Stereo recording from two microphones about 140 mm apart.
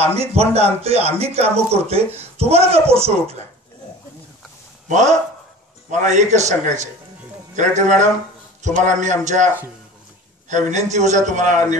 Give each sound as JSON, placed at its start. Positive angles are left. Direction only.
{"t": 0.3, "sound": "speech", "side_deg": -45}
{"t": 4.8, "sound": "a man's voice", "side_deg": -60}
{"t": 10.5, "sound": "a man's voice", "side_deg": -55}